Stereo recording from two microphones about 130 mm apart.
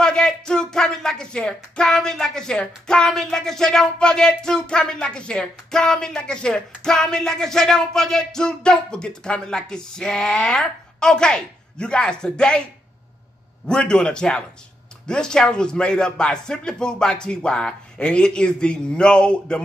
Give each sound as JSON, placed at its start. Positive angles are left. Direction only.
{"t": 0.0, "sound": "speech", "side_deg": 5}
{"t": 13.7, "sound": "speech", "side_deg": 5}